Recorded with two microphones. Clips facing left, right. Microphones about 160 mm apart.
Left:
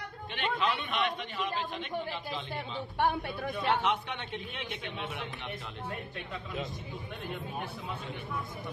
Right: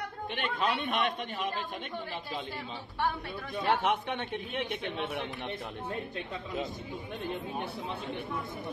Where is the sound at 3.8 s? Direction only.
50° right (ahead or behind).